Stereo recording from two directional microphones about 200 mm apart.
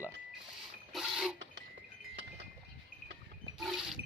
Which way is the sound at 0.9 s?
Centre (ahead or behind).